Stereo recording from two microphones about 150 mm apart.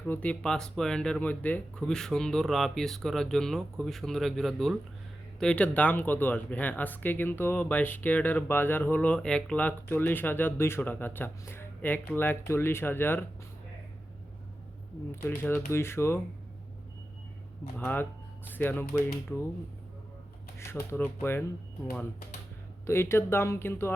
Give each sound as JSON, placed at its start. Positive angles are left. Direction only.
{"t": 0.1, "sound": "speech", "side_deg": 10}
{"t": 15.1, "sound": "speech", "side_deg": 15}
{"t": 17.7, "sound": "speech", "side_deg": 15}
{"t": 20.9, "sound": "speech", "side_deg": 15}
{"t": 22.9, "sound": "speech", "side_deg": 15}